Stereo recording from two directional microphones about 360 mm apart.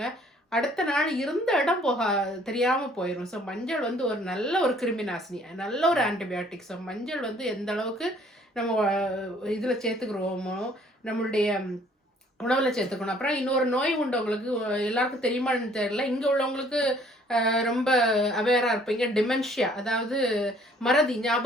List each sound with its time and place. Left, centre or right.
0.5 s a woman's voice: centre